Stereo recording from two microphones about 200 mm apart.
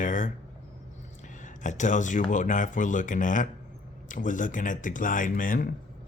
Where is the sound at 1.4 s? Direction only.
40° left (ahead or behind).